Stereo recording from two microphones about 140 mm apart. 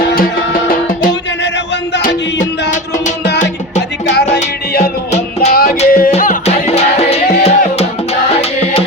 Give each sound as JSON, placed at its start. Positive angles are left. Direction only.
{"t": 0.7, "sound": "music", "side_deg": 90}
{"t": 4.0, "sound": "music", "side_deg": 55}
{"t": 5.5, "sound": "music", "side_deg": 90}
{"t": 6.1, "sound": "music", "side_deg": 55}